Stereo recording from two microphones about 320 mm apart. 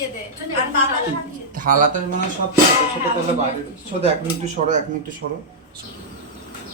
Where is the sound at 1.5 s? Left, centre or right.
Right.